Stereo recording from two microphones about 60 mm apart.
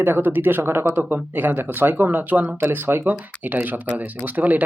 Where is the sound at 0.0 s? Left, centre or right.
Right.